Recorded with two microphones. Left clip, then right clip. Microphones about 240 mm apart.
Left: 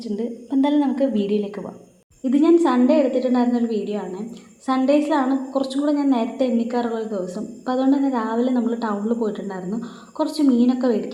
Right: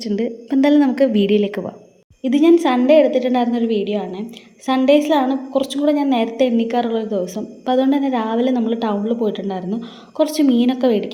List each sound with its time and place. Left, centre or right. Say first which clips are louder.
0.0 s a woman's voice: right 5 dB; right
2.2 s a woman's voice: right 3 dB; right